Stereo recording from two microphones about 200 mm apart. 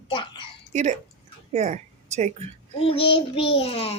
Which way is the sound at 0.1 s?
25° left (ahead or behind).